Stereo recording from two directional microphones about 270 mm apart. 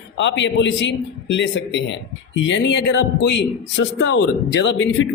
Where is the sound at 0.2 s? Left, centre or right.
Left.